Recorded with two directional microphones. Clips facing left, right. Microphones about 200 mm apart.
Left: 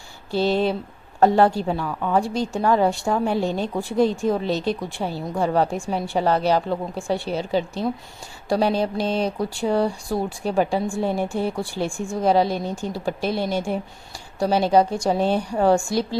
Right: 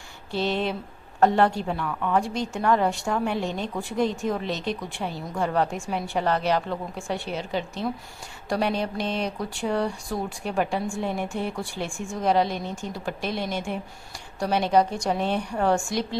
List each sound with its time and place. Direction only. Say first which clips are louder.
0.3 s a woman's voice: left 5 dB; 35° left (ahead or behind)